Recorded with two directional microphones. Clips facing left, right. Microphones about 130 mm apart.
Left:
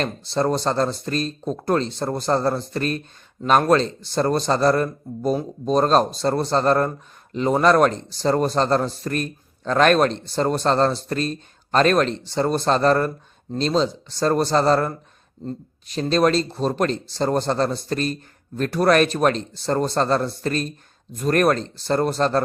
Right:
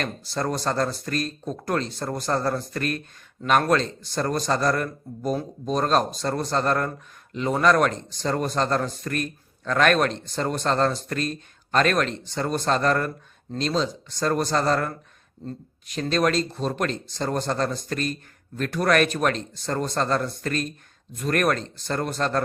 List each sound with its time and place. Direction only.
0.0 s speech: 25° left (ahead or behind)